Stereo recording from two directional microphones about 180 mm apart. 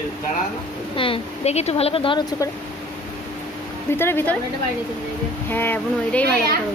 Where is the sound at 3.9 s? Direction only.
10° left (ahead or behind).